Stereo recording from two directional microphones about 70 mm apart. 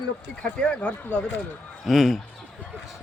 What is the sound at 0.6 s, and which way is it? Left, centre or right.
Speech, centre.